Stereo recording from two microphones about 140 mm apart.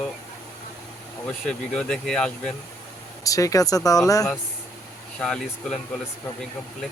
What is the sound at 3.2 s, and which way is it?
Speech, 25° left (ahead or behind).